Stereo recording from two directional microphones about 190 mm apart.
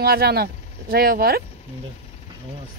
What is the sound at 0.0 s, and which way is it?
Speech, 55° right (ahead or behind).